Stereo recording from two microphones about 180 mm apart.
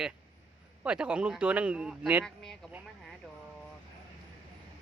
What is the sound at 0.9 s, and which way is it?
Speech, 5° right (ahead or behind).